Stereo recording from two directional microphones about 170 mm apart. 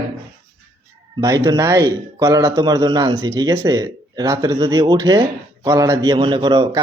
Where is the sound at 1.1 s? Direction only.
20° right (ahead or behind).